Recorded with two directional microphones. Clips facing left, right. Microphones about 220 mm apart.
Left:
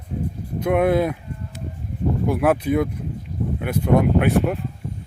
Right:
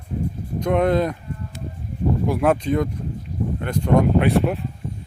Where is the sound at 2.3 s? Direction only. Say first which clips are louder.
Left 1 dB; 5° left (ahead or behind).